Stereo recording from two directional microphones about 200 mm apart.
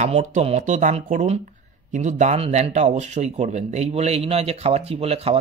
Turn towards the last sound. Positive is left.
turn(degrees=-30)  # may be behind; listen again after turning